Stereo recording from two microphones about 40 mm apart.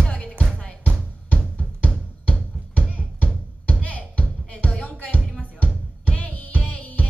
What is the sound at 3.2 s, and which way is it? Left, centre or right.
Music, left.